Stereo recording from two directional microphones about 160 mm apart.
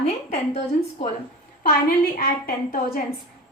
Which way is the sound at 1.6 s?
70° left (ahead or behind).